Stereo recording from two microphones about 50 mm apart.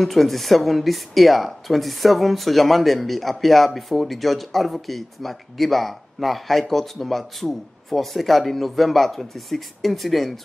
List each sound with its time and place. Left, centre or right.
0.0 s speech: centre